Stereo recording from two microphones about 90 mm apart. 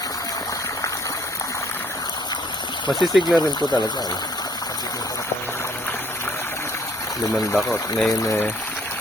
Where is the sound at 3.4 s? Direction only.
50° left (ahead or behind).